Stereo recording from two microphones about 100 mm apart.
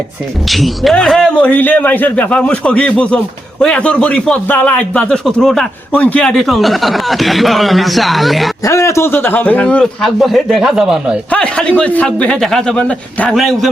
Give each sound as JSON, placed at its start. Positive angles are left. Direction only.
{"t": 0.4, "sound": "speech", "side_deg": 0}
{"t": 1.4, "sound": "a man's voice", "side_deg": 15}
{"t": 5.9, "sound": "speech", "side_deg": 15}
{"t": 8.6, "sound": "a man's voice", "side_deg": 30}
{"t": 11.3, "sound": "a man's voice", "side_deg": 10}
{"t": 13.3, "sound": "speech", "side_deg": 0}